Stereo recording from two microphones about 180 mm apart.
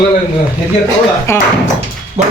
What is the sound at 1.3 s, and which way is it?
Speech, 15° left (ahead or behind).